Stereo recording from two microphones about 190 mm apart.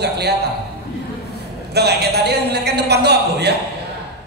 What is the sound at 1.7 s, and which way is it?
A man's voice, 60° right (ahead or behind).